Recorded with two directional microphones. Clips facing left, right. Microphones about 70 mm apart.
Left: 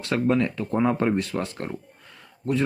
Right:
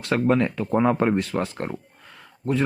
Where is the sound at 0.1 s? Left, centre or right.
Right.